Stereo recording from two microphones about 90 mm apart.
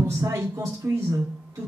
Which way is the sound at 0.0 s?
30° right (ahead or behind).